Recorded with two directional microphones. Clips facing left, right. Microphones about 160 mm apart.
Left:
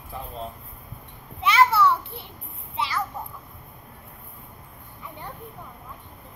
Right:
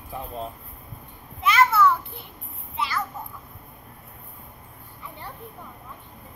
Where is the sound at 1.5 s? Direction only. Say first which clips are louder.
Even; 30° left (ahead or behind).